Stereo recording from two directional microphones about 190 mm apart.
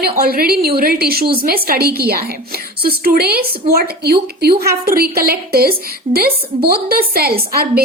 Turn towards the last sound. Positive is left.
turn(degrees=-55)  # may be behind; listen again after turning